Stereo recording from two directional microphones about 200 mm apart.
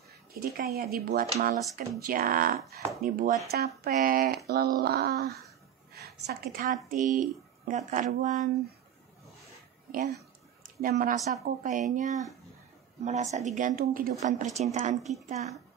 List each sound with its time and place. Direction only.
0.3 s speech: 50° right (ahead or behind)
5.9 s a sound: 50° right (ahead or behind)
6.6 s speech: 40° right (ahead or behind)
9.8 s speech: 45° right (ahead or behind)